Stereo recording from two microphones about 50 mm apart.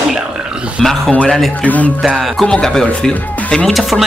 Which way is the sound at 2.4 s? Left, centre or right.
Centre.